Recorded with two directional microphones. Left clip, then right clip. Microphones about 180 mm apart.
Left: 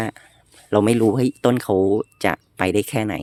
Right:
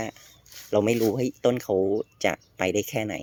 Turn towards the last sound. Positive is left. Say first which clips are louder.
# left 5 dB
turn(degrees=60)  # may be behind; listen again after turning